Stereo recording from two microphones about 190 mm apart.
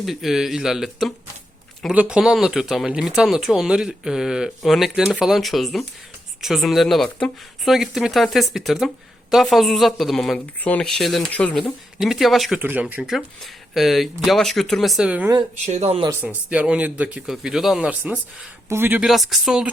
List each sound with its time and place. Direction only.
0.0 s speech: centre (ahead or behind)
15.6 s speech: 35° right (ahead or behind)
16.0 s speech: 10° right (ahead or behind)